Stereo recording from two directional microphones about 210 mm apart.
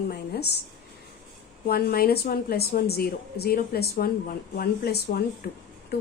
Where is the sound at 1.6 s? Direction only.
45° left (ahead or behind).